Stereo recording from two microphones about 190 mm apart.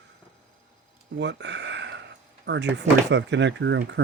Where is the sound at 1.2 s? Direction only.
65° right (ahead or behind).